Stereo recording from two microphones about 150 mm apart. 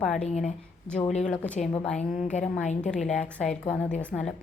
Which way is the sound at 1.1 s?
50° left (ahead or behind).